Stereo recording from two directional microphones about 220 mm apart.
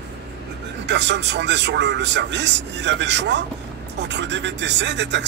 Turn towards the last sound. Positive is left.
turn(degrees=-55)  # may be behind; listen again after turning